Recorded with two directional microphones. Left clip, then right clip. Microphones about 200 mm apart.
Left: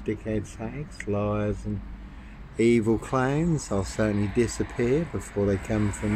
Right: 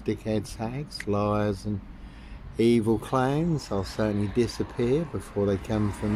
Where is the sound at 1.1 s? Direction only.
30° right (ahead or behind).